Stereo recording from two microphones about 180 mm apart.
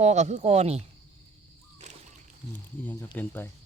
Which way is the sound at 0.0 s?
40° right (ahead or behind).